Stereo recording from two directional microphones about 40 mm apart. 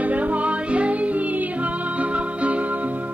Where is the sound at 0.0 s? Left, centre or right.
Right.